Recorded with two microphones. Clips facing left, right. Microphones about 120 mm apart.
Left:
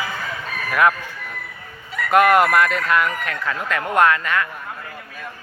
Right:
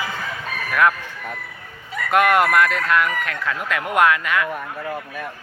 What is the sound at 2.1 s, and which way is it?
Speech, centre (ahead or behind).